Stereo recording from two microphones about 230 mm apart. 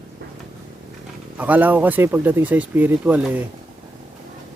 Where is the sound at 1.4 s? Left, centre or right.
Centre.